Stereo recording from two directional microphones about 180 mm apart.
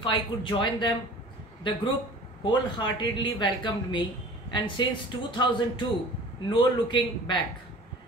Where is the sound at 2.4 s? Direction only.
25° left (ahead or behind).